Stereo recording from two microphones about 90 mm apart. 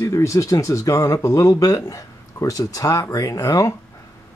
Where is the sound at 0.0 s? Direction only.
35° left (ahead or behind).